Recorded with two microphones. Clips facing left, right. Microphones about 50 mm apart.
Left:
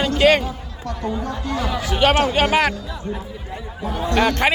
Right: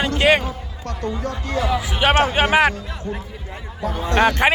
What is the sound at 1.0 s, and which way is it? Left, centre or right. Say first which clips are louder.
Speech: even; right.